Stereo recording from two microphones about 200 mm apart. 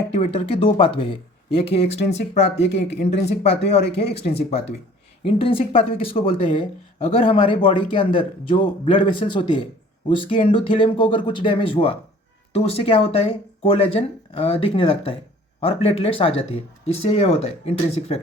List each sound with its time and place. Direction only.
0.1 s speech: 30° left (ahead or behind)
3.8 s speech: 50° left (ahead or behind)
4.1 s speech: 30° left (ahead or behind)